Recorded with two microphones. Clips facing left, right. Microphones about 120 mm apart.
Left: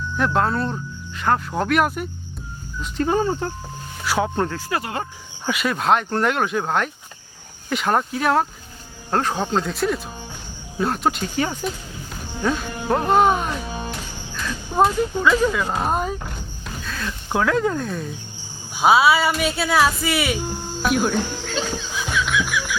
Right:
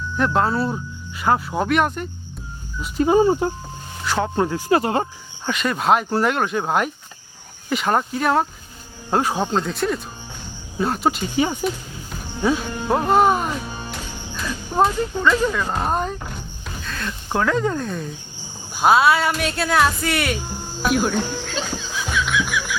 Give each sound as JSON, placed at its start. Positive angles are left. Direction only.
{"t": 0.2, "sound": "speech", "side_deg": 0}
{"t": 2.8, "sound": "speech", "side_deg": -10}
{"t": 4.0, "sound": "speech", "side_deg": 5}
{"t": 4.7, "sound": "speech", "side_deg": -30}
{"t": 5.5, "sound": "speech", "side_deg": 5}
{"t": 9.0, "sound": "speech", "side_deg": -10}
{"t": 14.8, "sound": "speech", "side_deg": 0}
{"t": 20.8, "sound": "a sound", "side_deg": 0}